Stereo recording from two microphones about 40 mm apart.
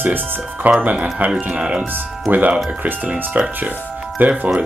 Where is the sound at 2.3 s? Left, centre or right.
Right.